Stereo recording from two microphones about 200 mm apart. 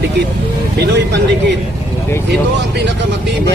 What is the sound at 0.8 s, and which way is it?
Speech, 60° right (ahead or behind).